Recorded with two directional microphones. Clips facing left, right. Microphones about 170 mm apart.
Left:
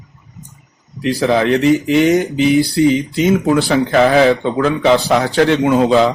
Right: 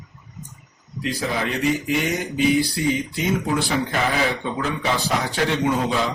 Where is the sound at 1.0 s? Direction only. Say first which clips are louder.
Left 11 dB; 75° left (ahead or behind); by 6.1 s 90° left.